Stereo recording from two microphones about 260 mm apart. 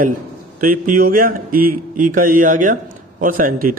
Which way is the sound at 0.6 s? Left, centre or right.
Right.